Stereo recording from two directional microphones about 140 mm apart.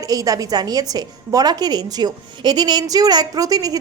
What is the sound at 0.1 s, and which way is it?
A woman's voice, 25° right (ahead or behind).